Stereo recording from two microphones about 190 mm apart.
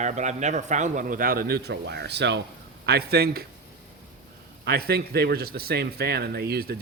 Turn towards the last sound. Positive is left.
turn(degrees=-55)  # may be behind; listen again after turning